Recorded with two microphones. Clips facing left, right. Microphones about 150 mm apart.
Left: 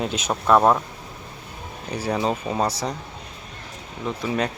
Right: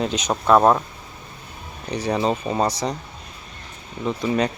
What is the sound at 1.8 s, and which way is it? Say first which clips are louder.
Speech: right 2 dB; 5° left (ahead or behind).